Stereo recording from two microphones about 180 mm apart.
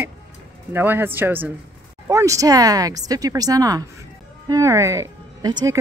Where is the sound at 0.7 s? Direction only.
10° right (ahead or behind).